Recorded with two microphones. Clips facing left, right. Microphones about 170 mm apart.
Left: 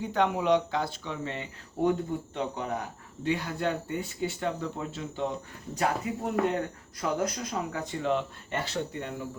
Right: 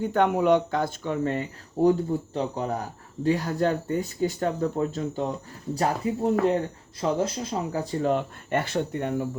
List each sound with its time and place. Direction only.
0.0 s speech: 50° right (ahead or behind)
1.9 s speech: 35° right (ahead or behind); by 9.1 s 55° right (ahead or behind)